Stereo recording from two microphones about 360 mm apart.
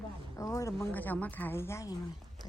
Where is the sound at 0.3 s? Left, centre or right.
Centre.